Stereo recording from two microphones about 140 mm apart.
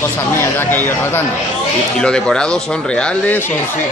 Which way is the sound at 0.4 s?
15° left (ahead or behind).